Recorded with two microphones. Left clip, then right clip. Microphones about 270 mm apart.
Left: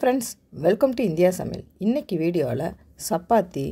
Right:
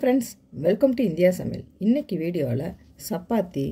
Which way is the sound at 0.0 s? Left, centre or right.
Left.